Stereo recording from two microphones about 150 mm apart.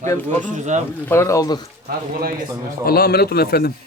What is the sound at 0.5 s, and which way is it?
Speech, 55° right (ahead or behind).